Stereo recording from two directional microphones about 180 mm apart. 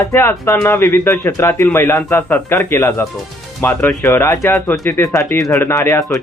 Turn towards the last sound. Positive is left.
turn(degrees=15)  # may be behind; listen again after turning